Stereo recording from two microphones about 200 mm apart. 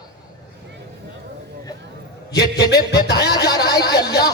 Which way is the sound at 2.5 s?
55° left (ahead or behind).